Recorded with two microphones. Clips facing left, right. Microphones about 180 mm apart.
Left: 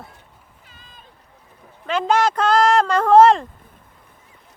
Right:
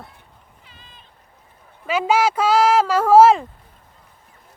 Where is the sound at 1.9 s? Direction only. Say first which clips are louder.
Even; 5° right (ahead or behind).